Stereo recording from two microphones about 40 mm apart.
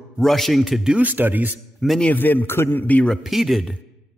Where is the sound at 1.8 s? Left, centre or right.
Centre.